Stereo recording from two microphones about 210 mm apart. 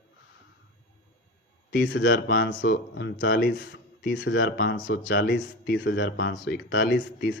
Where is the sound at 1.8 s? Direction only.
60° left (ahead or behind).